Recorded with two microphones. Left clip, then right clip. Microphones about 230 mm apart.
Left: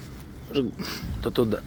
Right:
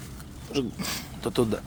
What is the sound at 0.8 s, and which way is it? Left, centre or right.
Speech, right.